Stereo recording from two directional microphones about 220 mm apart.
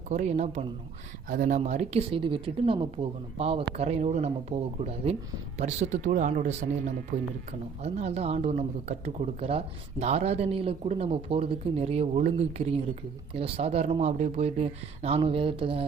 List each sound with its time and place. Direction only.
0.1 s speech: 30° right (ahead or behind)